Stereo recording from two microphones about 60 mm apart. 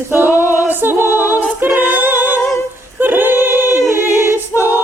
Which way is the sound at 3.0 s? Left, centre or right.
Right.